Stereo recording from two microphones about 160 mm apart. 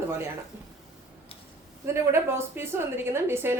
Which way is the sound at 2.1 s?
15° right (ahead or behind).